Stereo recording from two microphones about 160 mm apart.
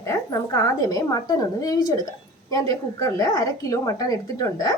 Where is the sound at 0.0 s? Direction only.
20° left (ahead or behind).